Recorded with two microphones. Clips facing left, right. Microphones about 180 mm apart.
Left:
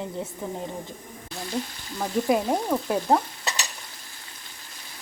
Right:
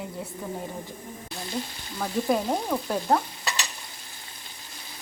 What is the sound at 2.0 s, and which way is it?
Frying, 10° left (ahead or behind).